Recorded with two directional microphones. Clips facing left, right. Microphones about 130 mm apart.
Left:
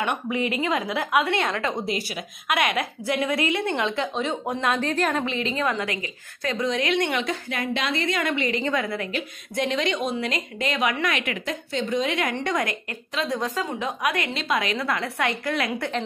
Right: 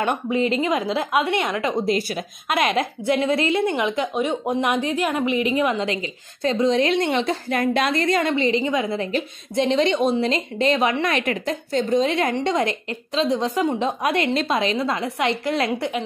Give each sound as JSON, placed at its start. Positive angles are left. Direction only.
{"t": 0.0, "sound": "a woman's voice", "side_deg": -30}
{"t": 1.9, "sound": "speech", "side_deg": -45}
{"t": 2.4, "sound": "a woman's voice", "side_deg": -30}